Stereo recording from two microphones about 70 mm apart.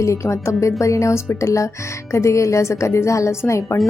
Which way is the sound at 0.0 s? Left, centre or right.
Left.